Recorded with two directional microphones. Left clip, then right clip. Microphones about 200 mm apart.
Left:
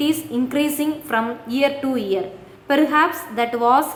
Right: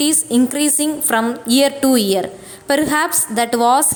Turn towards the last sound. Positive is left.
turn(degrees=-35)  # may be behind; listen again after turning